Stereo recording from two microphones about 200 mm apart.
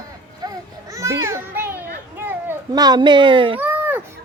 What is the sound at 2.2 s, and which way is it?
Children playing, 10° right (ahead or behind).